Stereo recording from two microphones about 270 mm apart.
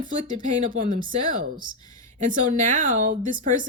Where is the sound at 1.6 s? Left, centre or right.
Centre.